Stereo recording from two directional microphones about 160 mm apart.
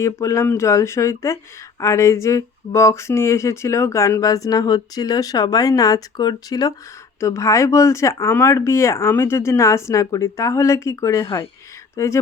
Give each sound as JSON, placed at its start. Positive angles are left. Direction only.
{"t": 0.0, "sound": "speech", "side_deg": 20}